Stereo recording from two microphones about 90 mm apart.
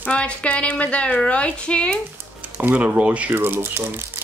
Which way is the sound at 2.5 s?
15° right (ahead or behind).